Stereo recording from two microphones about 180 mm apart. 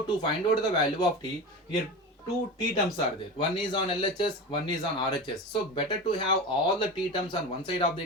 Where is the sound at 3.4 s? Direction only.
25° left (ahead or behind).